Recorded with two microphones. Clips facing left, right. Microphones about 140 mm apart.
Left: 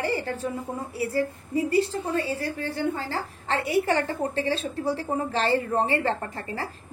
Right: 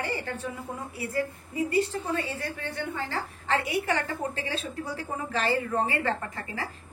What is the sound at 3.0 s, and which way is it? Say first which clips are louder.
A woman's voice: left 2 dB; 35° left (ahead or behind).